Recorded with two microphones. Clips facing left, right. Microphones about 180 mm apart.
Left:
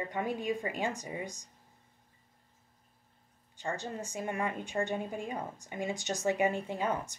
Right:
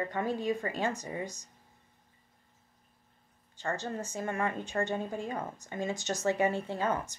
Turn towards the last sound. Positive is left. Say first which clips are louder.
# right 1 dB
turn(degrees=15)  # may be behind; listen again after turning